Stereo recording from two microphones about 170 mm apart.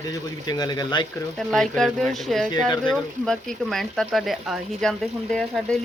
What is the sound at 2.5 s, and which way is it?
Speech, 25° left (ahead or behind).